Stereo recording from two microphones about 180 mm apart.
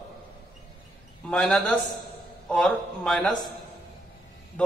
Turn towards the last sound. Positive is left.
turn(degrees=5)  # may be behind; listen again after turning